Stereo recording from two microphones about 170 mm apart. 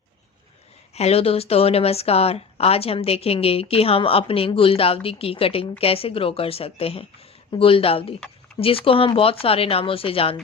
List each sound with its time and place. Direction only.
0.9 s speech: 35° left (ahead or behind)